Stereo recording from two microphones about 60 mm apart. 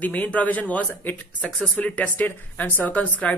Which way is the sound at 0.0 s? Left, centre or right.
Left.